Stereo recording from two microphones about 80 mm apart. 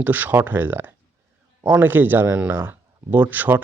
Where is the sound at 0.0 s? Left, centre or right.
Right.